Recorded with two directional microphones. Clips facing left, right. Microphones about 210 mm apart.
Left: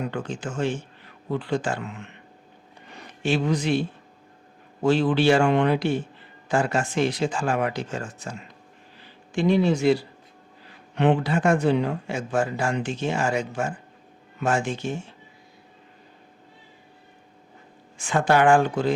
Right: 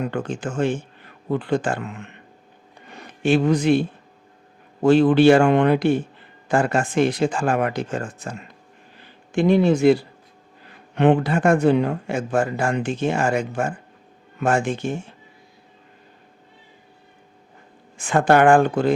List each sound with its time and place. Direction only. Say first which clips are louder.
0.0 s speech: right 4 dB; 55° right (ahead or behind)
3.2 s speech: right 6 dB; 55° right (ahead or behind)
17.9 s speech: right 4 dB; 55° right (ahead or behind)